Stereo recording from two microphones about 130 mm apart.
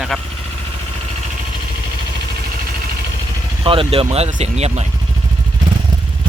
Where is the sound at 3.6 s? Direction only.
45° right (ahead or behind).